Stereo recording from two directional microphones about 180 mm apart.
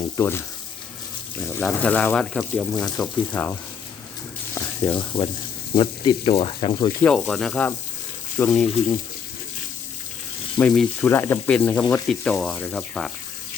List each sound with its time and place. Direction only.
0.2 s speech: 15° left (ahead or behind)
1.5 s speech: 10° left (ahead or behind)
4.5 s speech: 20° left (ahead or behind)
7.0 s speech: 5° left (ahead or behind)
10.6 s speech: 5° left (ahead or behind)